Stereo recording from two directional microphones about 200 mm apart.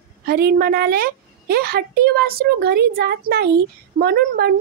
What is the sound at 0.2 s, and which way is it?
A woman's voice, 50° right (ahead or behind).